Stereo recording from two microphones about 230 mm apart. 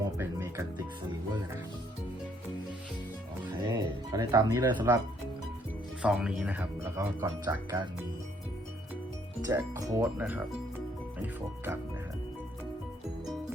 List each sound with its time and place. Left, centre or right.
0.0 s music: centre
3.7 s speech: centre
6.0 s speech: centre
9.5 s speech: centre